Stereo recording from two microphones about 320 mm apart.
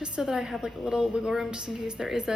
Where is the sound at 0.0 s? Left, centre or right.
Centre.